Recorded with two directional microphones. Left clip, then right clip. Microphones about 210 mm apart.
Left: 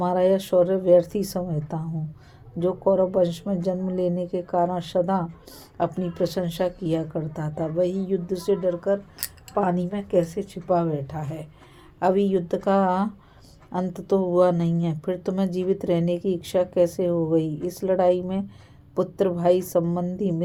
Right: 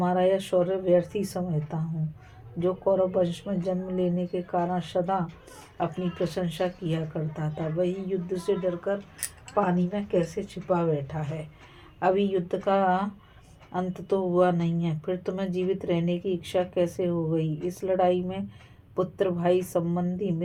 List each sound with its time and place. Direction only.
0.0 s speech: 40° left (ahead or behind)